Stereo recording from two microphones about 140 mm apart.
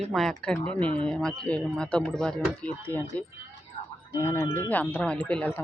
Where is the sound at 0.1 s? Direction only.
5° left (ahead or behind).